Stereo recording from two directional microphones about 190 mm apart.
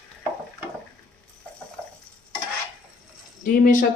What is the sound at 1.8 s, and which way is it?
Stir, 5° left (ahead or behind).